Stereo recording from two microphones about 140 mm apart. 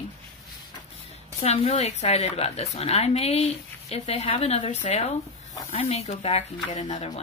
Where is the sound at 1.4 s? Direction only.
50° left (ahead or behind).